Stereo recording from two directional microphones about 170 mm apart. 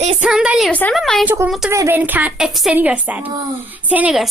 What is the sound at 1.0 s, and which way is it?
Speech, centre (ahead or behind).